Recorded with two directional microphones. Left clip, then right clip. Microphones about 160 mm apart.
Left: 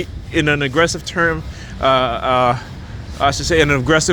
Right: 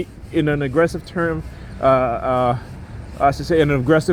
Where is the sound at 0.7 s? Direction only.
30° right (ahead or behind).